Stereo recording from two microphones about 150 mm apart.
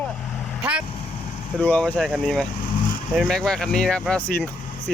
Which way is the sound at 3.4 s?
5° left (ahead or behind).